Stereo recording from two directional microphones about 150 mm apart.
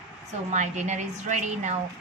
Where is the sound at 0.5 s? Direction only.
50° right (ahead or behind).